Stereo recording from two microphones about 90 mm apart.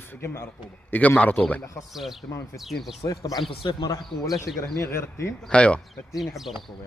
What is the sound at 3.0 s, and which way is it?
Speech, 40° left (ahead or behind).